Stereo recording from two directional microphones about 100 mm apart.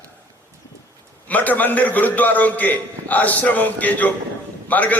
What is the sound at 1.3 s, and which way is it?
A man's voice, 15° left (ahead or behind).